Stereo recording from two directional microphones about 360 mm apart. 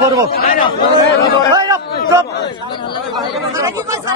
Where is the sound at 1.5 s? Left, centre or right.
Centre.